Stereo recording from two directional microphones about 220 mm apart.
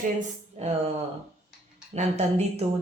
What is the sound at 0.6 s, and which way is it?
Speech, 30° right (ahead or behind).